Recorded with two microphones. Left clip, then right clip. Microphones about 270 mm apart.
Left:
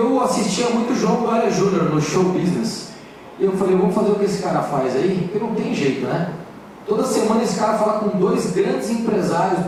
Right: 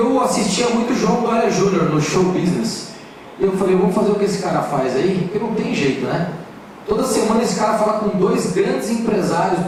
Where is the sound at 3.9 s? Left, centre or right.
Centre.